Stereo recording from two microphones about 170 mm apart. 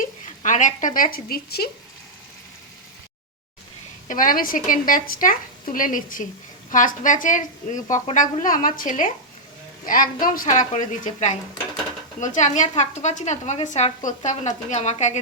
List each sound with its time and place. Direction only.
0.4 s a woman's voice: 45° left (ahead or behind); by 1.7 s 65° left (ahead or behind)
4.1 s a woman's voice: 55° left (ahead or behind)